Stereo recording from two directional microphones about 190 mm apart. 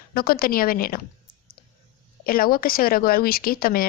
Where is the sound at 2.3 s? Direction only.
50° left (ahead or behind).